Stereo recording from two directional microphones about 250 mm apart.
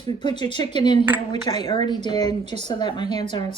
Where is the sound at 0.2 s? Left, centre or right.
Centre.